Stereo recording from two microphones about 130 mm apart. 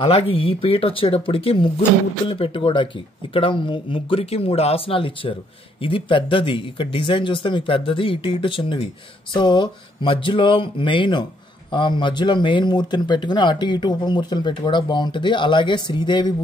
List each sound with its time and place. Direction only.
0.0 s speech: 45° left (ahead or behind)